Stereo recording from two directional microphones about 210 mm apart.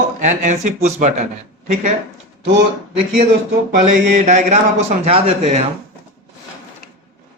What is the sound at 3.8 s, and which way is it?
Speech, 35° right (ahead or behind).